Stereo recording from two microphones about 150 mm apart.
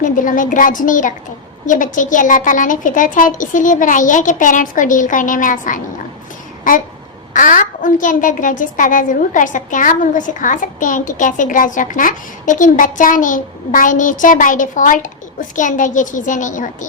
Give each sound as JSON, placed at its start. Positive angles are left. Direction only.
{"t": 0.0, "sound": "a woman's voice", "side_deg": 60}